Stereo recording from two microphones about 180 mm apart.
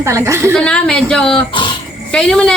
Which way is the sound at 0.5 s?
5° left (ahead or behind).